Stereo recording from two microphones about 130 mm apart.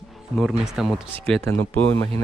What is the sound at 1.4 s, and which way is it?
Speech, 15° left (ahead or behind).